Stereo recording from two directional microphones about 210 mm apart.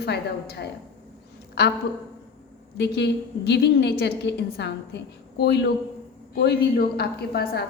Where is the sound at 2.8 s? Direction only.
55° left (ahead or behind).